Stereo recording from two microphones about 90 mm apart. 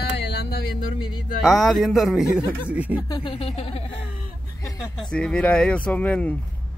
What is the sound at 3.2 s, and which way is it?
Speech, 90° left.